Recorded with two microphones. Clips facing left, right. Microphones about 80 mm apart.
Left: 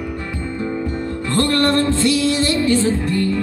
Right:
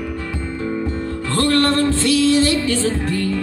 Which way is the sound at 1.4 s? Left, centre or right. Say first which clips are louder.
Even; left.